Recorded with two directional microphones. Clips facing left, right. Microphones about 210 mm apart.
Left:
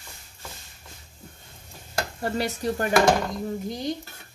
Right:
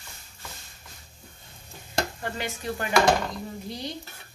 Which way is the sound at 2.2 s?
40° left (ahead or behind).